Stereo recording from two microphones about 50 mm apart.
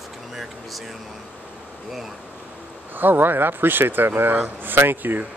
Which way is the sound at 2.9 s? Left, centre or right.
Right.